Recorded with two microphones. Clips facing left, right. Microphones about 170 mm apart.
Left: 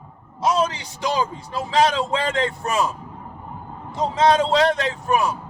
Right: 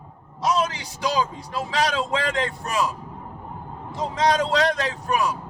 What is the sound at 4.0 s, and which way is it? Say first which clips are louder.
A man's voice: left 4 dB; 25° left (ahead or behind).